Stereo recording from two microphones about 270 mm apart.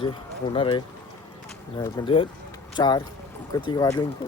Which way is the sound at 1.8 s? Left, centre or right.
Centre.